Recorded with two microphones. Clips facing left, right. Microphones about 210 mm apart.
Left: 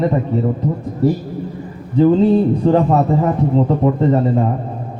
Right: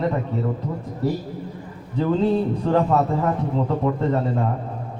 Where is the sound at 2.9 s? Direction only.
30° left (ahead or behind).